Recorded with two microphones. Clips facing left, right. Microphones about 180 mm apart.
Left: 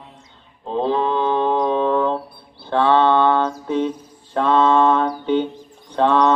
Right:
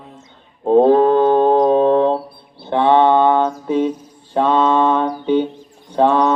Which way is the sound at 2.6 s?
20° right (ahead or behind).